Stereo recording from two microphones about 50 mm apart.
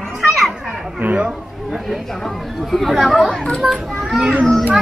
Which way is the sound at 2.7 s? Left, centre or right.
Centre.